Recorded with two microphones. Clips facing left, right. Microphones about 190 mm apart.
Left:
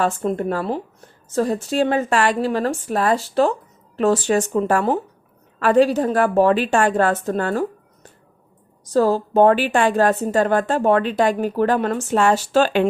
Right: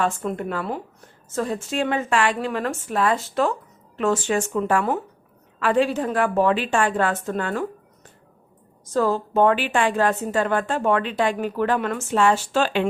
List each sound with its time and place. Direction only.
0.0 s a woman's voice: 35° left (ahead or behind)
8.9 s a woman's voice: 35° left (ahead or behind)